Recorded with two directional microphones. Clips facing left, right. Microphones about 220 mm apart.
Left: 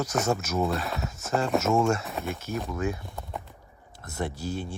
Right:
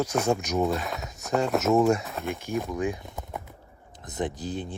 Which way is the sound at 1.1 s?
15° right (ahead or behind).